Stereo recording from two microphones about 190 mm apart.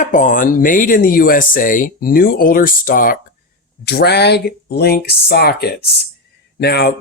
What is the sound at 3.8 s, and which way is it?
Speech, 60° left (ahead or behind).